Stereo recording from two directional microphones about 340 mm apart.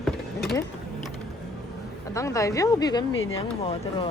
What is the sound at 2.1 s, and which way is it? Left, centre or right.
Speech, centre.